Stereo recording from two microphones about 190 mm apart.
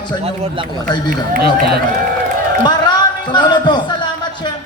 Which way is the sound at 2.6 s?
25° left (ahead or behind).